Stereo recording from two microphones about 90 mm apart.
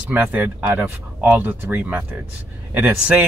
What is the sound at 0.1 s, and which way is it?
Speech, 20° right (ahead or behind).